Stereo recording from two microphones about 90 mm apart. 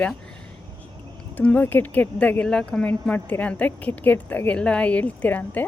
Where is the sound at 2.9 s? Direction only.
20° left (ahead or behind).